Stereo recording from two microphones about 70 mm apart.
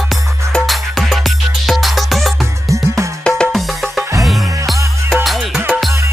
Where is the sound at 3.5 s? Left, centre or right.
Centre.